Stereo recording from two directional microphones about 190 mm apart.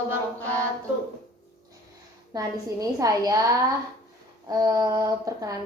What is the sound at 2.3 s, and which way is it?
A woman's voice, 20° right (ahead or behind).